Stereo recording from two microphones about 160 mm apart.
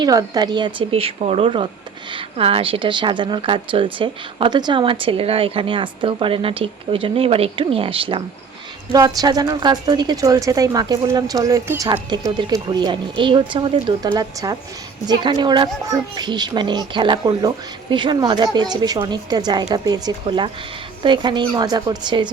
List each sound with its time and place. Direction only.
0.0 s a woman's voice: 25° right (ahead or behind)